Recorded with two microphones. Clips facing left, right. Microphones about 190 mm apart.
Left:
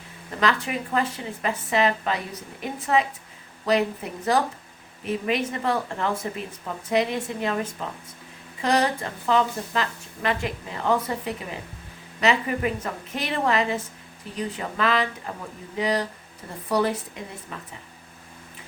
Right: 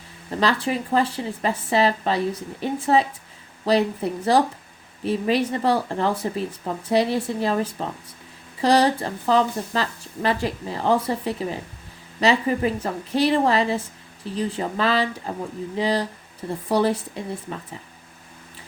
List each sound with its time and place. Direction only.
0.3 s speech: 30° right (ahead or behind)